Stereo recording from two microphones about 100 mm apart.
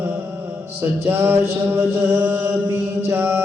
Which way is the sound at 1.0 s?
20° right (ahead or behind).